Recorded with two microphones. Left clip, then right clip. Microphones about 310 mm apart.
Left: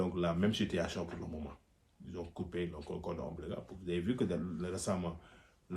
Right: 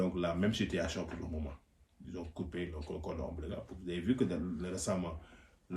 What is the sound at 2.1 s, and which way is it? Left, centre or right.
Speech, centre.